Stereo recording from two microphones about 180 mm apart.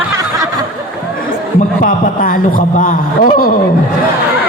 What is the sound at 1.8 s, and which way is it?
A man's voice, 50° left (ahead or behind).